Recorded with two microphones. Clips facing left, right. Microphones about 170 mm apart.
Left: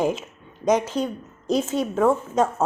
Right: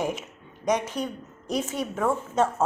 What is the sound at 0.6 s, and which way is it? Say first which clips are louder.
Speech: left 5 dB; 90° left.